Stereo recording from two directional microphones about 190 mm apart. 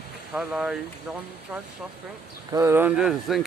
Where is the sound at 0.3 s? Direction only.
5° right (ahead or behind).